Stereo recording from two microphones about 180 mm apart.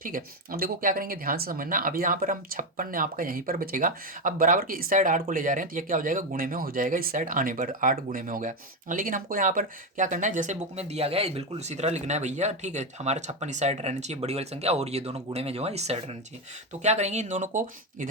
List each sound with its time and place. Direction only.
0.0 s speech: 55° right (ahead or behind)